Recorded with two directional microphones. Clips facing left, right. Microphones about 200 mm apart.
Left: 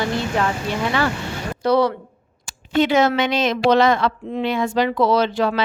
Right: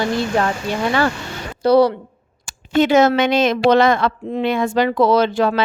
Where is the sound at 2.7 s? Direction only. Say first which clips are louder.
Right 3 dB; 45° right (ahead or behind).